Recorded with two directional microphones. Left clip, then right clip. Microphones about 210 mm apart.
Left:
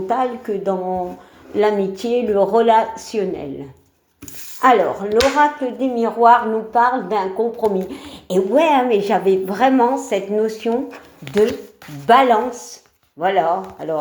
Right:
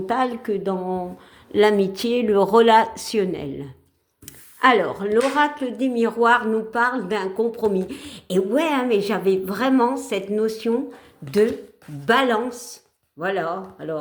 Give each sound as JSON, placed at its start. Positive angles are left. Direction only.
{"t": 0.1, "sound": "speech", "side_deg": -55}
{"t": 4.6, "sound": "speech", "side_deg": -50}
{"t": 12.0, "sound": "speech", "side_deg": -40}